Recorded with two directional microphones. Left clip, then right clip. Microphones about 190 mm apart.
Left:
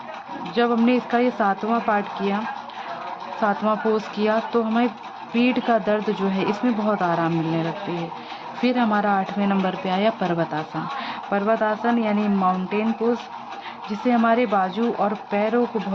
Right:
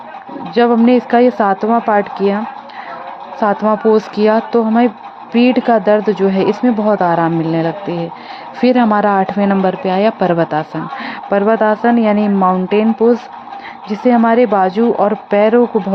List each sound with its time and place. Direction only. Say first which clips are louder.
0.5 s speech: right 9 dB; 30° right (ahead or behind)
3.4 s speech: right 9 dB; 30° right (ahead or behind)